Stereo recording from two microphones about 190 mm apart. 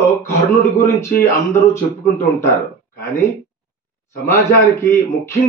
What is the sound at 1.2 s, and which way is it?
Speech, 15° left (ahead or behind).